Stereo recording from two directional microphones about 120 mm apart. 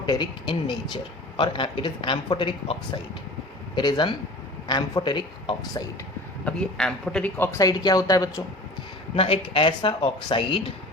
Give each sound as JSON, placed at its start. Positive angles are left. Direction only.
{"t": 0.0, "sound": "speech", "side_deg": 40}
{"t": 6.4, "sound": "speech", "side_deg": 5}
{"t": 7.3, "sound": "speech", "side_deg": 20}
{"t": 7.6, "sound": "speech", "side_deg": 35}
{"t": 9.1, "sound": "speech", "side_deg": 55}